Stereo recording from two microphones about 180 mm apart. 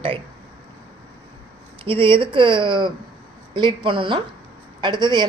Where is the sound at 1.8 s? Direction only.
30° right (ahead or behind).